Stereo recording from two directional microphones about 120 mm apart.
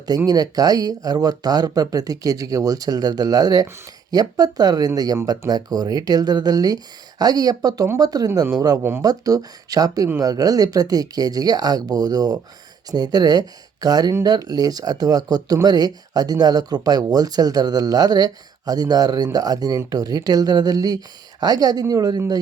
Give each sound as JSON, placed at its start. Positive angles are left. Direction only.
{"t": 0.3, "sound": "speech", "side_deg": -30}